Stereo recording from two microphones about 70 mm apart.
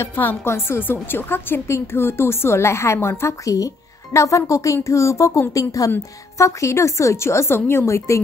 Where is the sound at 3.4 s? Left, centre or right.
Left.